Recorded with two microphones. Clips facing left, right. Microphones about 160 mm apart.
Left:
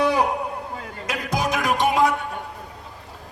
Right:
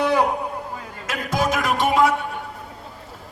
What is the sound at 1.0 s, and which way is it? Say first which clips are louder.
Music: right 2 dB; 15° left (ahead or behind).